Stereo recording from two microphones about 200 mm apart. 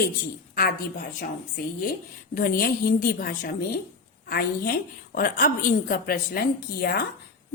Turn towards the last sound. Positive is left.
turn(degrees=50)  # may be behind; listen again after turning